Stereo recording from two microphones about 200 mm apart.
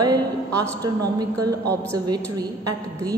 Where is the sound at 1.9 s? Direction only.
20° right (ahead or behind).